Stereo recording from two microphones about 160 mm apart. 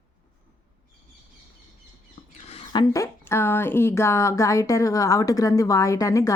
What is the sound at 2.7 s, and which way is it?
Speech, 25° left (ahead or behind).